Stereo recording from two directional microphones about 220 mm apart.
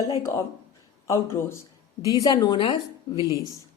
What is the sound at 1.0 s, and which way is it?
Speech, 10° left (ahead or behind).